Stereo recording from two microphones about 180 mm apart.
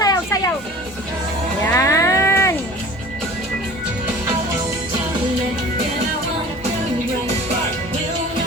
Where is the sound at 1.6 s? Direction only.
15° left (ahead or behind).